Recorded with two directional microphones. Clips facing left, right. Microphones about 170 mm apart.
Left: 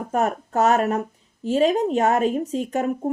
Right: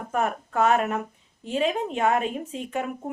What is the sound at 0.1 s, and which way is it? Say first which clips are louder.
A woman's voice: left 3 dB; 40° left (ahead or behind).